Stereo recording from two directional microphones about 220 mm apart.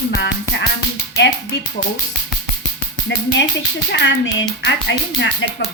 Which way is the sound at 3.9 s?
55° left (ahead or behind).